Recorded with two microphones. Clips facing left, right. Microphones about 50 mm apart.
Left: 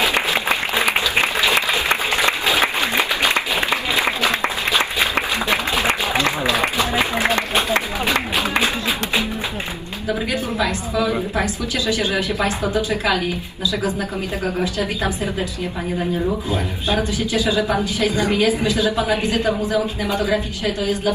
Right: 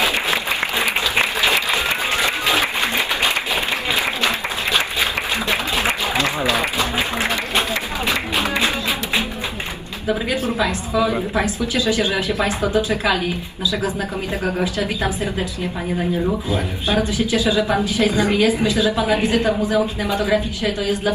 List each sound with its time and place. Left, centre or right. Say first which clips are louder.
0.3 s applause: left 2 dB; left
2.1 s a sound: left 1 dB; left
3.2 s applause: left 2 dB; left
4.3 s a sound: left 1 dB; left
6.1 s a sound: even; left
6.6 s applause: left 2 dB; left
10.6 s a woman's voice: right 1 dB; right
14.4 s speech: right 1 dB; right
17.1 s a woman's voice: right 1 dB; right